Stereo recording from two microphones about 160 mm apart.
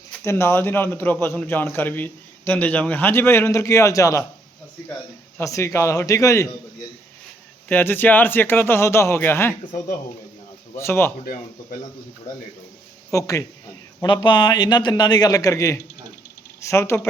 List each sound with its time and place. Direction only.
0.3 s a man's voice: 15° left (ahead or behind)
5.4 s a man's voice: 20° left (ahead or behind)
7.7 s a man's voice: 10° left (ahead or behind)
10.8 s a man's voice: 15° left (ahead or behind)
13.1 s a man's voice: 20° left (ahead or behind)